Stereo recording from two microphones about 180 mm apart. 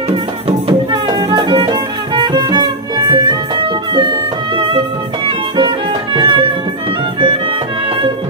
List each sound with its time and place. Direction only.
0.1 s music: 30° right (ahead or behind)